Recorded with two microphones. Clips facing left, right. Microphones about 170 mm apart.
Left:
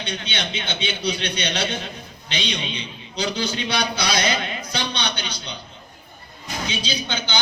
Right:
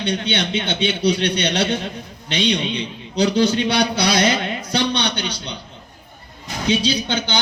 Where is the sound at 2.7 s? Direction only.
65° right (ahead or behind).